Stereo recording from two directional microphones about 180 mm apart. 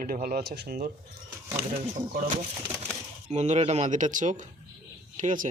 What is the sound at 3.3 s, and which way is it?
Speech, 40° right (ahead or behind).